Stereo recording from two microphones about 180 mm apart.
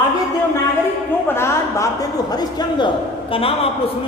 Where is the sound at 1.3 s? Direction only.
15° left (ahead or behind); by 3.7 s 30° left (ahead or behind).